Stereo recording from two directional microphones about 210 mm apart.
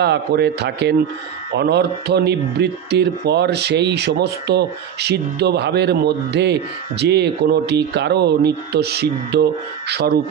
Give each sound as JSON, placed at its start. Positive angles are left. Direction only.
{"t": 0.0, "sound": "speech", "side_deg": -50}